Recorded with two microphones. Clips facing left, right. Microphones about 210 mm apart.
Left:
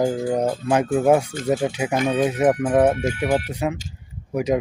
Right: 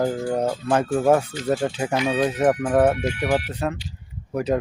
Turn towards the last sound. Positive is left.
turn(degrees=10)  # may be behind; listen again after turning